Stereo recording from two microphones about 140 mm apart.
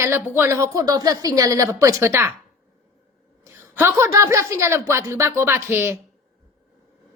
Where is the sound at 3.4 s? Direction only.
20° right (ahead or behind).